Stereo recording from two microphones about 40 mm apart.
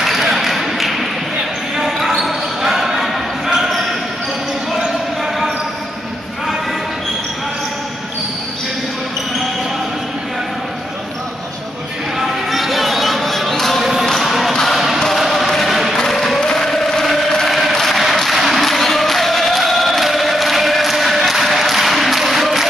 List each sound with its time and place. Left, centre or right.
0.0 s a sound: centre
1.8 s basketball bounce: centre
12.3 s basketball bounce: centre
16.0 s chant: centre